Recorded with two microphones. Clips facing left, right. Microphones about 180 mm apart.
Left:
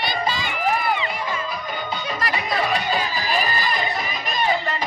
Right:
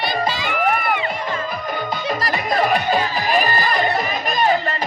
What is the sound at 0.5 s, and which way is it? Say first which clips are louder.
Music: right 2 dB; 60° right (ahead or behind).